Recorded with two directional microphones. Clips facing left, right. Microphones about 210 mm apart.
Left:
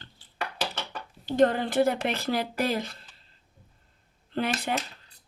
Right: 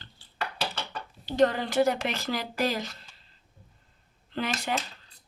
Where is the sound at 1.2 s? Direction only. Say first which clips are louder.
Left 2 dB; 50° left (ahead or behind).